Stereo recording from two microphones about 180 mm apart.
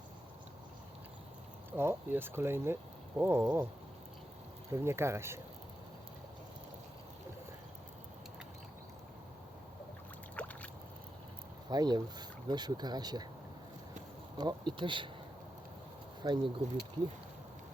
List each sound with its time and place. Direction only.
1.7 s speech: 15° right (ahead or behind)
4.7 s speech: 15° right (ahead or behind)
10.3 s boat: 10° left (ahead or behind)
11.7 s speech: 25° right (ahead or behind)
14.3 s speech: 25° right (ahead or behind)
16.2 s speech: 25° right (ahead or behind)